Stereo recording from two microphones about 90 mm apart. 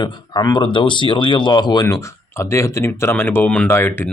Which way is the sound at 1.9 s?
30° left (ahead or behind).